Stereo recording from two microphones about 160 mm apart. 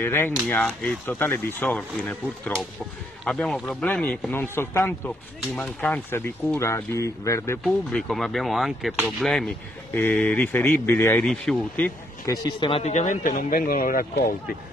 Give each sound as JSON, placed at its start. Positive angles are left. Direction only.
{"t": 0.0, "sound": "speech", "side_deg": 15}
{"t": 7.6, "sound": "speech", "side_deg": 0}
{"t": 11.2, "sound": "speech", "side_deg": 5}
{"t": 12.3, "sound": "speech", "side_deg": 30}